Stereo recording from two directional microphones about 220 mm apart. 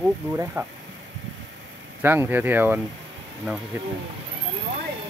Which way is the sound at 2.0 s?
10° right (ahead or behind).